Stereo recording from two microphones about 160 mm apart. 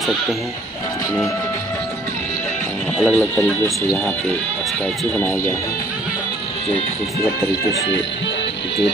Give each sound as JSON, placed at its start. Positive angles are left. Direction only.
{"t": 3.0, "sound": "speech", "side_deg": 5}
{"t": 5.1, "sound": "speech", "side_deg": 10}